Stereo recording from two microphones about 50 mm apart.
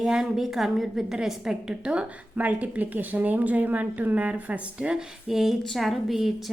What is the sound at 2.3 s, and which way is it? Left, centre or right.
A woman's voice, right.